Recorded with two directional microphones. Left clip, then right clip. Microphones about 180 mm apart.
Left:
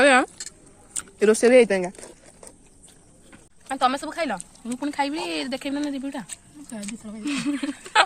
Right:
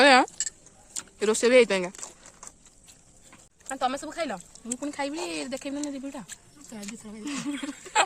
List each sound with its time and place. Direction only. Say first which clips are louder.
0.0 s a sound: left 1 dB; 15° right (ahead or behind)
0.9 s speech: left 7 dB; centre (ahead or behind)
3.3 s speech: left 5 dB; 5° right (ahead or behind)
6.2 s speech: left 4 dB; 60° right (ahead or behind)
7.2 s speech: left 7 dB; 20° right (ahead or behind)
7.9 s a sound: left 5 dB; 5° right (ahead or behind)